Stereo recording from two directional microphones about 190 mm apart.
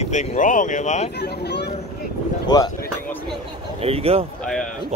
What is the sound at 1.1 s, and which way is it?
Speech, 60° left (ahead or behind).